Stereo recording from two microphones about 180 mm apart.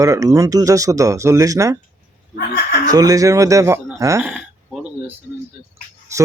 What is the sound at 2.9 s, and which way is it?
A man's voice, 20° right (ahead or behind).